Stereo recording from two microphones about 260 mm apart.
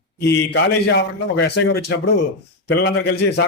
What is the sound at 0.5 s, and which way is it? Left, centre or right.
A man's voice, left.